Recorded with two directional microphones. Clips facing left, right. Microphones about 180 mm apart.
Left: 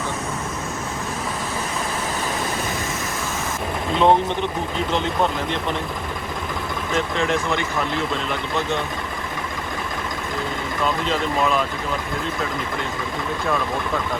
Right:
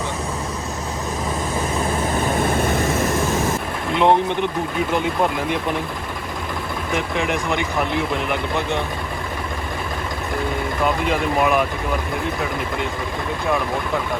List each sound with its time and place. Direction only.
2.4 s vehicle: 60° right (ahead or behind)
3.9 s speech: 15° right (ahead or behind)
6.9 s speech: 15° right (ahead or behind)
11.0 s speech: 15° right (ahead or behind)